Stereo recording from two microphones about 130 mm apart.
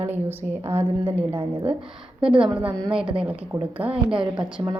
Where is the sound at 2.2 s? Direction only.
5° right (ahead or behind).